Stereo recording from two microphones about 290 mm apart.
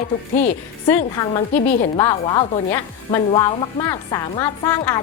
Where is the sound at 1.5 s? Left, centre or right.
Left.